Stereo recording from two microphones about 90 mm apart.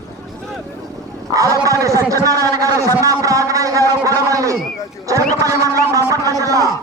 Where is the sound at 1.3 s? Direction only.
40° right (ahead or behind).